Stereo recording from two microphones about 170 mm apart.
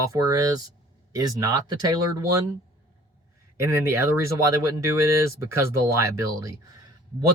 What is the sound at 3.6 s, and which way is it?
Speech, 15° right (ahead or behind).